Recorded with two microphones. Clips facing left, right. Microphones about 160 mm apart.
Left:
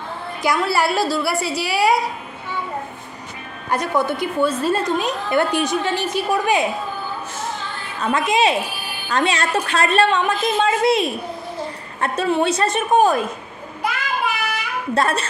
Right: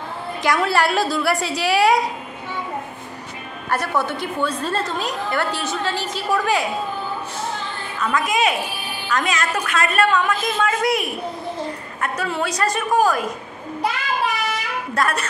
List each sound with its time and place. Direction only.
0.4 s a woman's voice: 10° left (ahead or behind)
3.7 s a woman's voice: 15° left (ahead or behind)
8.0 s a woman's voice: 30° left (ahead or behind)
15.0 s a woman's voice: 25° left (ahead or behind)